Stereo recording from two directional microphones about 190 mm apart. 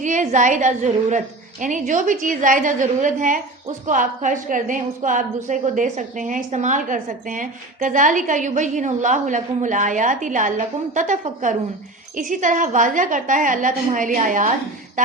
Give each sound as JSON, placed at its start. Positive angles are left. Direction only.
{"t": 0.0, "sound": "a woman's voice", "side_deg": -40}